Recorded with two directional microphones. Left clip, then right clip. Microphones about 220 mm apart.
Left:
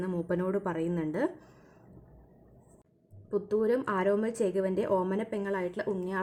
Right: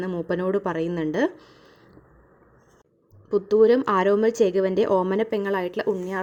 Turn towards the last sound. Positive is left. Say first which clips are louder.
# right 8 dB
turn(degrees=-20)  # may be behind; listen again after turning